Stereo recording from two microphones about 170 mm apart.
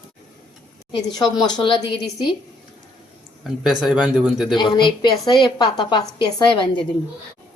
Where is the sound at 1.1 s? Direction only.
25° left (ahead or behind).